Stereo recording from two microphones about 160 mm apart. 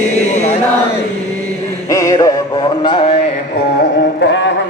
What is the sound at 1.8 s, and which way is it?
Music, 20° left (ahead or behind).